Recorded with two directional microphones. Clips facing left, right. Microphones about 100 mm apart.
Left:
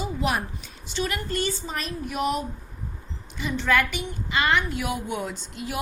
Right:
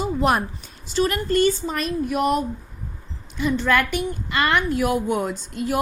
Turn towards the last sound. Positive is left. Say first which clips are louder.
# right 8 dB
turn(degrees=-45)  # may be behind; listen again after turning